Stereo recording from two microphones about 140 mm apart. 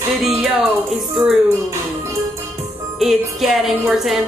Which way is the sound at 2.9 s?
Centre (ahead or behind).